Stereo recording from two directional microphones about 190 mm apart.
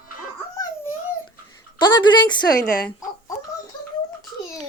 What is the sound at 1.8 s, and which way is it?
Speech, 20° left (ahead or behind).